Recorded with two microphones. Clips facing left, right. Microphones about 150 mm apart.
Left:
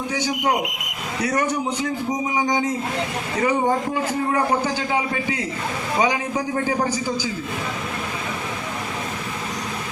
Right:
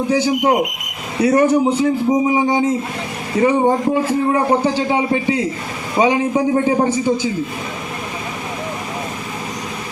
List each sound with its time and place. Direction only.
0.1 s a man's voice: 30° right (ahead or behind)